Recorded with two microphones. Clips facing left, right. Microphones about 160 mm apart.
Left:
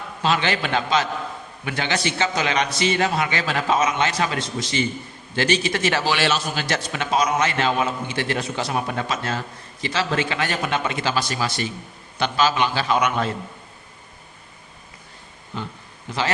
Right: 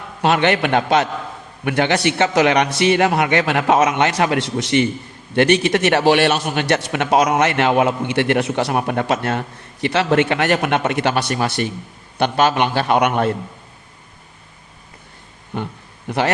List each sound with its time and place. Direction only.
0.2 s a man's voice: 60° right (ahead or behind)
15.5 s a man's voice: 60° right (ahead or behind)